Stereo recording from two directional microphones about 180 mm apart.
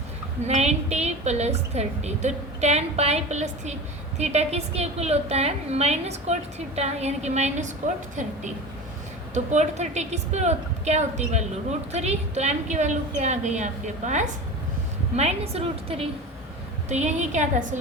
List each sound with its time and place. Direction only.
0.4 s a woman's voice: 35° right (ahead or behind)
9.3 s a woman's voice: 40° right (ahead or behind)